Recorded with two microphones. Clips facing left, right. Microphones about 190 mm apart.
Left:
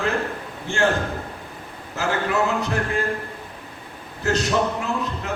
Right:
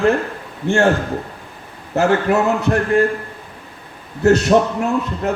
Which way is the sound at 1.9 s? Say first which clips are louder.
Right 8 dB; 60° right (ahead or behind).